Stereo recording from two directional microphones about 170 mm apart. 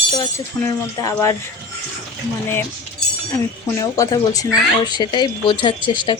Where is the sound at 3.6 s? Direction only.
20° left (ahead or behind).